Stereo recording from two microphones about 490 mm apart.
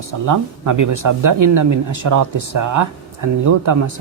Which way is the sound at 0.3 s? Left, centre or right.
Right.